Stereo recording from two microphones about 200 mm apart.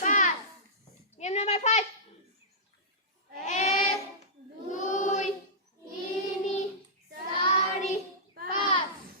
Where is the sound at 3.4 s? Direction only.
35° left (ahead or behind).